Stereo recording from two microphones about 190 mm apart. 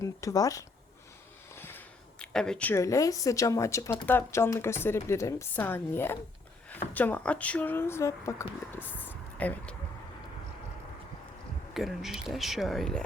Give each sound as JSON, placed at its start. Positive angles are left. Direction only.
{"t": 0.0, "sound": "a woman's voice", "side_deg": 15}
{"t": 11.7, "sound": "speech", "side_deg": 0}